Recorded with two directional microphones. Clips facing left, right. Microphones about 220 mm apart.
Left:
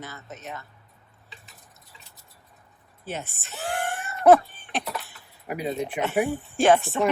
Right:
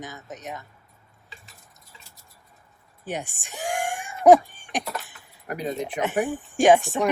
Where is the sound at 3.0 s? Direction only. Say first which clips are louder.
Right 2 dB; 15° right (ahead or behind).